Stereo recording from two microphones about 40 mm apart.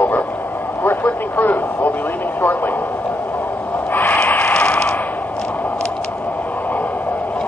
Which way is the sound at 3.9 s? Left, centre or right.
Left.